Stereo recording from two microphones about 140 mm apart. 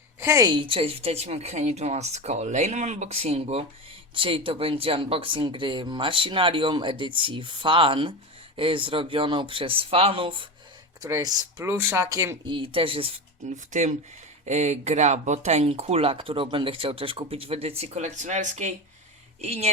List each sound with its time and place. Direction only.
0.2 s a woman's voice: 20° right (ahead or behind)
0.5 s speech: 40° right (ahead or behind)
11.0 s speech: 25° right (ahead or behind)
13.7 s speech: 60° right (ahead or behind)
19.4 s speech: 50° right (ahead or behind)